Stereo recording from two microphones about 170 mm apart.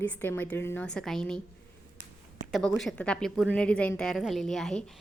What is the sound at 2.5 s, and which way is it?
A woman's voice, centre (ahead or behind).